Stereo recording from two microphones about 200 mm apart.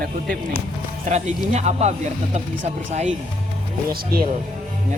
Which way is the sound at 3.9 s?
50° right (ahead or behind).